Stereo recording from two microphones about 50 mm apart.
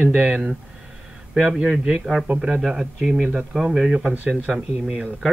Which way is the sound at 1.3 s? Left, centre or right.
Centre.